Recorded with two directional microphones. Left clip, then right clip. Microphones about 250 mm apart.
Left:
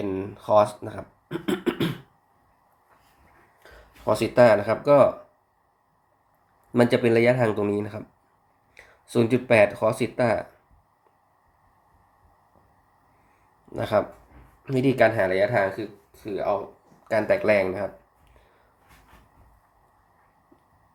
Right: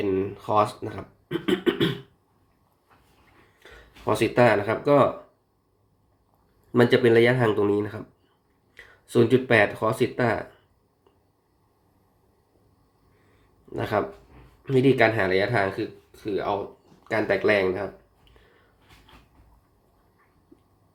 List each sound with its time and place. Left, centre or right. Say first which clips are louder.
0.0 s speech: right 4 dB; centre
3.6 s speech: even; centre
6.8 s speech: right 1 dB; centre
13.7 s speech: left 2 dB; centre
17.1 s speech: left 1 dB; centre